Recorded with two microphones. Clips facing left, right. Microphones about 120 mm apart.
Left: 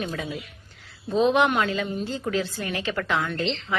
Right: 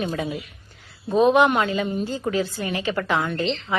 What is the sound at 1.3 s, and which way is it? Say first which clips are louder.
A woman's voice: right 3 dB; 5° right (ahead or behind).